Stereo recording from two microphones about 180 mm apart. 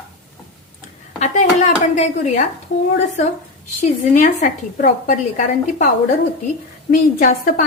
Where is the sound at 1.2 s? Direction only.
40° left (ahead or behind).